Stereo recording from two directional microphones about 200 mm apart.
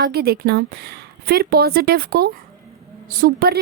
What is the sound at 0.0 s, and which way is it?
Speech, 50° right (ahead or behind).